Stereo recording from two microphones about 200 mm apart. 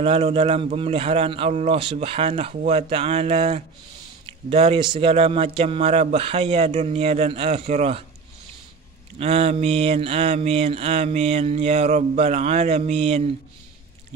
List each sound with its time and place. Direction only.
0.0 s mantra: 30° right (ahead or behind)
4.5 s speech: 30° right (ahead or behind)
4.9 s mantra: 30° right (ahead or behind)
9.2 s mantra: 30° right (ahead or behind)